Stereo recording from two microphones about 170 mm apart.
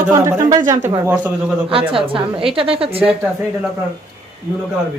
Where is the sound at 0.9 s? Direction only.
15° right (ahead or behind).